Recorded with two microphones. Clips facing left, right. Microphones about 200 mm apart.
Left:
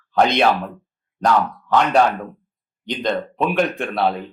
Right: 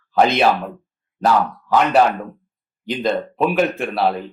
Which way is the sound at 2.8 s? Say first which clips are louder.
Right 2 dB; 5° right (ahead or behind).